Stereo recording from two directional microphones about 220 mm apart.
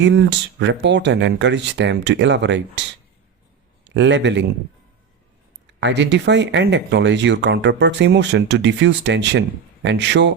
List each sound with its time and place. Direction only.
0.0 s speech: 55° right (ahead or behind)
3.9 s a man's voice: 55° right (ahead or behind)
5.6 s speech: 55° right (ahead or behind)